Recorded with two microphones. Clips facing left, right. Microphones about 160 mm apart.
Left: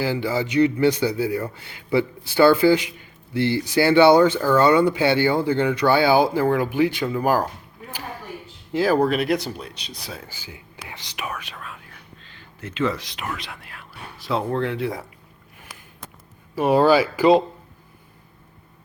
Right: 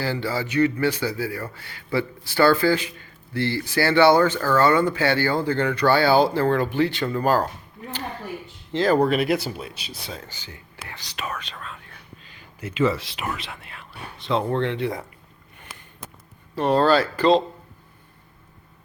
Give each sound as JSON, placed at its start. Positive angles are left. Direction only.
{"t": 0.0, "sound": "speech", "side_deg": 15}
{"t": 8.7, "sound": "speech", "side_deg": 10}
{"t": 12.2, "sound": "speech", "side_deg": -10}
{"t": 16.6, "sound": "speech", "side_deg": 10}